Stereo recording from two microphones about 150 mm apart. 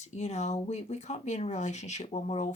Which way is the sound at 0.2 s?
50° left (ahead or behind).